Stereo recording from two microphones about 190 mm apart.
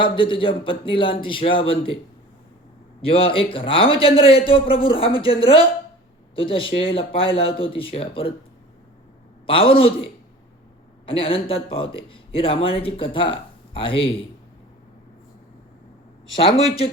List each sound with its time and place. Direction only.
0.0 s a man's voice: 25° left (ahead or behind)
3.0 s a man's voice: 30° left (ahead or behind)
9.5 s a man's voice: 30° left (ahead or behind)
16.3 s a man's voice: 25° left (ahead or behind)